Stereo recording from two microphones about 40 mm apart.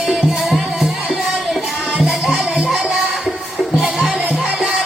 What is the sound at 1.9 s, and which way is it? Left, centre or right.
Music, right.